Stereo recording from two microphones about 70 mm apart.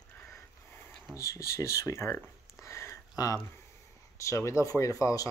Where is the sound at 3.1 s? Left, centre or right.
Left.